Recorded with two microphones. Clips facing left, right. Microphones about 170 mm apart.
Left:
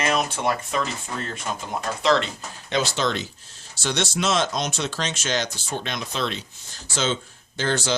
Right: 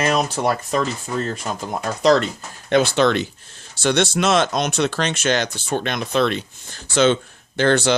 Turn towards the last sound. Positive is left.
turn(degrees=-65)  # may be behind; listen again after turning